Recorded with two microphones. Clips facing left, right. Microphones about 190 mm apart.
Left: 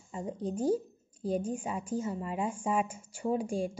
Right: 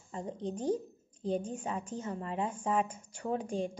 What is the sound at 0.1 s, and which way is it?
A woman's voice, 10° left (ahead or behind).